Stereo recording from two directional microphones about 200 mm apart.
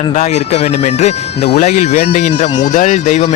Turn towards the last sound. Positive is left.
turn(degrees=35)  # may be behind; listen again after turning